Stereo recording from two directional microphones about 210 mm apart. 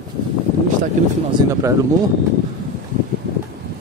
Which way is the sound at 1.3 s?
20° right (ahead or behind).